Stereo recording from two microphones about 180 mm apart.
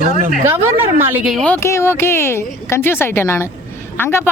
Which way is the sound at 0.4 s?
10° right (ahead or behind).